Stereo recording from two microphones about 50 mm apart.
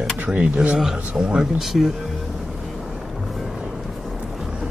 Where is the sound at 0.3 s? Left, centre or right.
Right.